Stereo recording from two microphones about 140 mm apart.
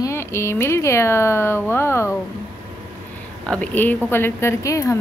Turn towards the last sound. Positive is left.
turn(degrees=20)  # may be behind; listen again after turning